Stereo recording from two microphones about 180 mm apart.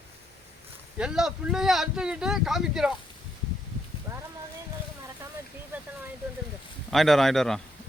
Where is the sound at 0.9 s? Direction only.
5° right (ahead or behind).